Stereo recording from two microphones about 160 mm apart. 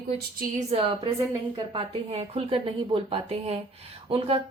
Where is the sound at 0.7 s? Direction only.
35° right (ahead or behind).